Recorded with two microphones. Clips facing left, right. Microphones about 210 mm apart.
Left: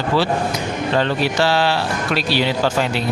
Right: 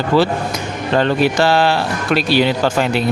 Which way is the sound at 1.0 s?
50° right (ahead or behind).